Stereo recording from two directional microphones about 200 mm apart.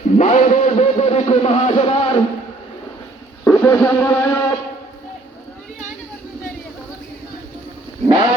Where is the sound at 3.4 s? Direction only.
10° left (ahead or behind).